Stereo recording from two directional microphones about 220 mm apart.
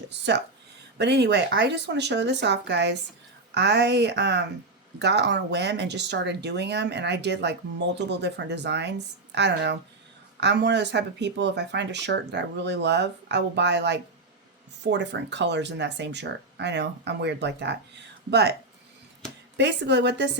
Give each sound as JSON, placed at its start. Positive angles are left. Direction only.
{"t": 0.1, "sound": "speech", "side_deg": -50}
{"t": 19.5, "sound": "speech", "side_deg": -50}